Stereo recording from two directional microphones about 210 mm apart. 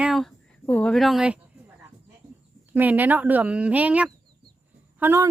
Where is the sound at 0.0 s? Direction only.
Centre (ahead or behind).